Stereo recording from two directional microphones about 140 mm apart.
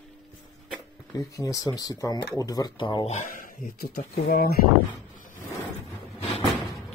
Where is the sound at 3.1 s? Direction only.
65° left (ahead or behind); by 4.6 s 90° left.